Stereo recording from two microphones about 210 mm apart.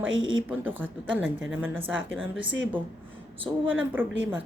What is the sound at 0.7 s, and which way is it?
Speech, 10° right (ahead or behind).